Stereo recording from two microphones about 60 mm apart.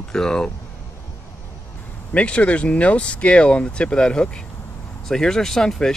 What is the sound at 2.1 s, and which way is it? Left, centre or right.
Speech, left.